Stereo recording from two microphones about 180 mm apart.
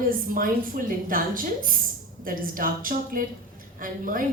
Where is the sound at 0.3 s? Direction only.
50° right (ahead or behind).